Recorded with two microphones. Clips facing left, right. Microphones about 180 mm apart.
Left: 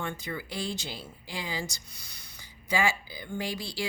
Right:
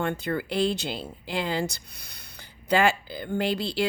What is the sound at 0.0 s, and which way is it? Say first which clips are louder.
A woman's voice: right 8 dB; 60° right (ahead or behind).